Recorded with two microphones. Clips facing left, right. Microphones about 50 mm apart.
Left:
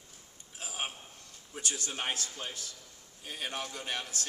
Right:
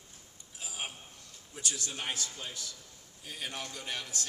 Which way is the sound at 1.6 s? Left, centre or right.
Left.